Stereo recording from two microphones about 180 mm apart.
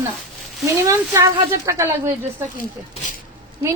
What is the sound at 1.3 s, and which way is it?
Speech, 15° right (ahead or behind).